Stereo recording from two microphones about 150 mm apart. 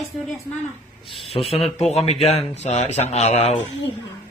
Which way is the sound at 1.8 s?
45° left (ahead or behind).